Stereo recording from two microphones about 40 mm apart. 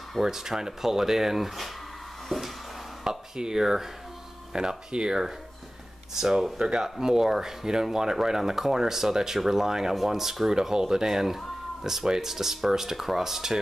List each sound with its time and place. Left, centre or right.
0.2 s speech: centre
2.2 s a sound: centre
3.0 s speech: centre